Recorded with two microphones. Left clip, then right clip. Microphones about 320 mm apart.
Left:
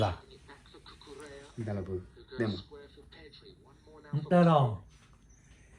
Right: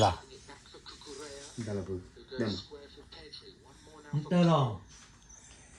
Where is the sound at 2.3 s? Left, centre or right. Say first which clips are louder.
Left 1 dB; centre.